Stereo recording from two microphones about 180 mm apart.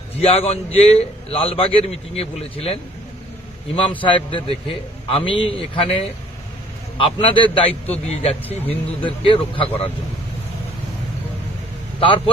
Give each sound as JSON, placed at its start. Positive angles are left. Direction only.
{"t": 0.2, "sound": "a man's voice", "side_deg": 35}
{"t": 4.0, "sound": "a man's voice", "side_deg": 30}
{"t": 11.9, "sound": "speech", "side_deg": 30}